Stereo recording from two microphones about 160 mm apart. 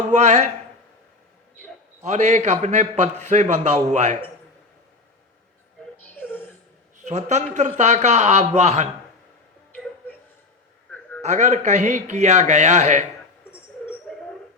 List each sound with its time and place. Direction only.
0.1 s a man's voice: 45° right (ahead or behind)
2.0 s a man's voice: 45° right (ahead or behind)
7.0 s a man's voice: 45° right (ahead or behind)
11.2 s a man's voice: 45° right (ahead or behind)